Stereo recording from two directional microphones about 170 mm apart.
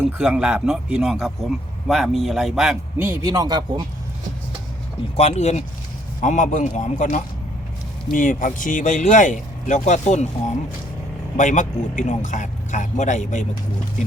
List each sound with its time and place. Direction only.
0.2 s a man's voice: 5° right (ahead or behind)
3.0 s speech: 15° right (ahead or behind)
5.1 s speech: 40° left (ahead or behind)
11.3 s speech: 45° left (ahead or behind)